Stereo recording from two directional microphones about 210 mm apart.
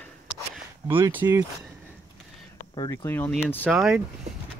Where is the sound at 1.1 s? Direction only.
15° right (ahead or behind).